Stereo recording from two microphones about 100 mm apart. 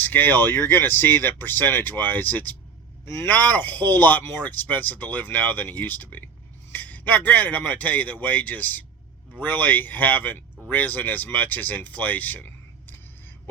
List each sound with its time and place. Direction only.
0.0 s speech: 20° left (ahead or behind)